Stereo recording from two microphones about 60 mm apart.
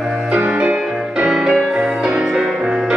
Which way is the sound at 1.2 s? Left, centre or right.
Centre.